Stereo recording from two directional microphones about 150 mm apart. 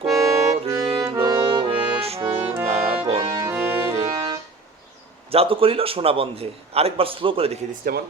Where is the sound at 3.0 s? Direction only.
40° right (ahead or behind).